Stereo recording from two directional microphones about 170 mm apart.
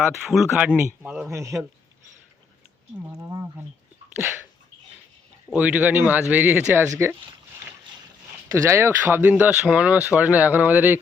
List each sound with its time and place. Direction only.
0.2 s speech: 5° right (ahead or behind)
1.3 s speech: 15° right (ahead or behind)
3.1 s speech: 20° right (ahead or behind)
5.5 s speech: 10° right (ahead or behind)
8.4 s speech: 15° right (ahead or behind)